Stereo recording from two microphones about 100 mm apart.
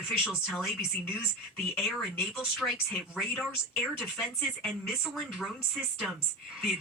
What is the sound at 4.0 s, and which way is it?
Speech, 5° right (ahead or behind).